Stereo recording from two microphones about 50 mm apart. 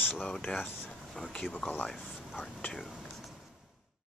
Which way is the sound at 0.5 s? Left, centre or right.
Left.